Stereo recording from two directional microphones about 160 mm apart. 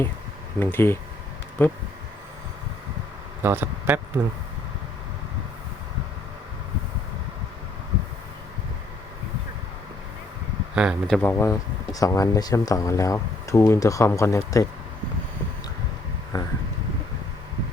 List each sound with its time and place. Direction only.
0.6 s speech: 15° left (ahead or behind)
3.4 s speech: 10° right (ahead or behind)
10.8 s speech: 5° right (ahead or behind)
11.2 s speech: 15° left (ahead or behind)
16.3 s a sound: 25° left (ahead or behind)